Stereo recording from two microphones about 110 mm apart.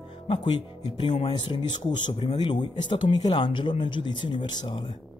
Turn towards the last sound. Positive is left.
turn(degrees=45)  # may be behind; listen again after turning